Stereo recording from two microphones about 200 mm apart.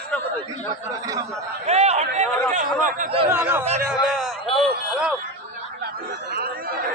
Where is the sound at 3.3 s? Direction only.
10° right (ahead or behind).